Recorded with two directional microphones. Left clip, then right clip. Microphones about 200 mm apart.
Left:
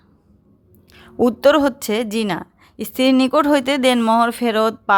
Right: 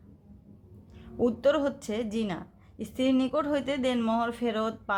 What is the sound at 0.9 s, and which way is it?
A woman's voice, 45° left (ahead or behind).